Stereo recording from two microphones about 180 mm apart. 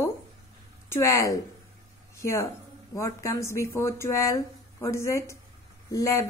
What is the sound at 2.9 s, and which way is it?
Speech, 15° left (ahead or behind).